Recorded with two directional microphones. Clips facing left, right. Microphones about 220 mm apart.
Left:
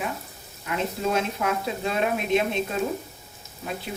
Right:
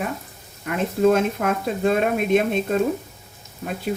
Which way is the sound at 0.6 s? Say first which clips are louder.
Right 8 dB; 50° right (ahead or behind).